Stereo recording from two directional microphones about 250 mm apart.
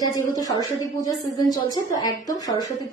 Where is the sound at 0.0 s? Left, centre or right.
Centre.